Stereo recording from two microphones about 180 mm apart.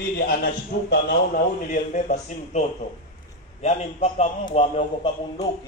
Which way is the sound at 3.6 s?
35° left (ahead or behind).